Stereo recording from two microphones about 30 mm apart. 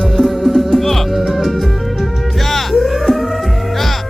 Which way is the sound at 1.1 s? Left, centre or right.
Centre.